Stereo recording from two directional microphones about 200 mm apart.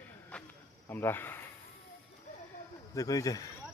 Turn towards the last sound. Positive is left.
turn(degrees=15)  # may be behind; listen again after turning